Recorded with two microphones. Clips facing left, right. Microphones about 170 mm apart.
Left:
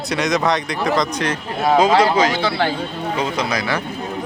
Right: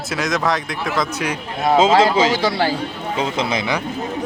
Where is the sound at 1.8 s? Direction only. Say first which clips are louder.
Right 1 dB; 25° right (ahead or behind).